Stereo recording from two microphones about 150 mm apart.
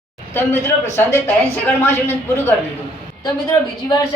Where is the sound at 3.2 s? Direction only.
25° left (ahead or behind).